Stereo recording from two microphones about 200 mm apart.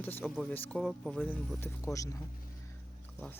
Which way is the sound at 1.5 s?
15° left (ahead or behind).